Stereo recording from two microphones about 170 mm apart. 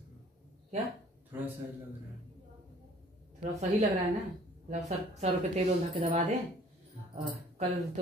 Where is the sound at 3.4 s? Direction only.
45° right (ahead or behind).